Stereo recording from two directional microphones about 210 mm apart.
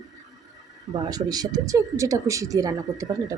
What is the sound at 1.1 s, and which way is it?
Speech, 20° right (ahead or behind).